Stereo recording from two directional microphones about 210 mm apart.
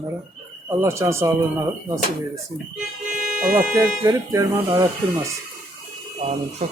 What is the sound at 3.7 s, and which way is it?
Speech, 15° right (ahead or behind).